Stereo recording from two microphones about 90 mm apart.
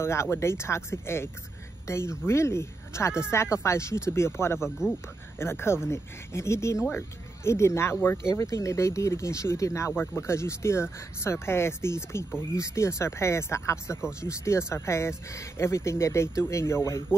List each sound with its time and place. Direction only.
0.0 s speech: 30° left (ahead or behind)
4.6 s speech: 5° right (ahead or behind)
5.4 s speech: 25° left (ahead or behind)